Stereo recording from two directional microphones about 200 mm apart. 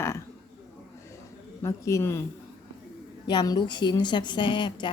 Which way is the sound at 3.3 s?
20° left (ahead or behind).